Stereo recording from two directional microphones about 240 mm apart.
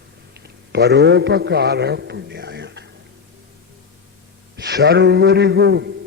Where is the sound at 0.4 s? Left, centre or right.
Right.